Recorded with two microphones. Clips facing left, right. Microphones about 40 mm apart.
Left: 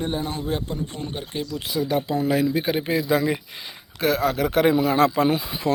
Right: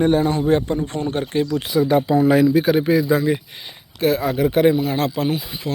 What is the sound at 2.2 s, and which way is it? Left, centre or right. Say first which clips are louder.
Speech: right 7 dB; centre.